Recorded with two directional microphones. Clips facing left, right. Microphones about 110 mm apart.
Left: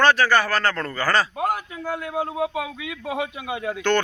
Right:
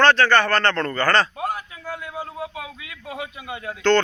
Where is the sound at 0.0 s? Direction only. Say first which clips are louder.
Right 2 dB; 10° left (ahead or behind).